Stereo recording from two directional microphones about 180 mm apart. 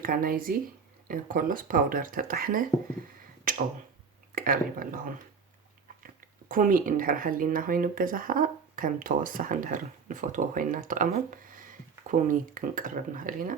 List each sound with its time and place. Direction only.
0.0 s speech: 50° right (ahead or behind)
4.4 s speech: 50° right (ahead or behind)
6.5 s speech: 50° right (ahead or behind)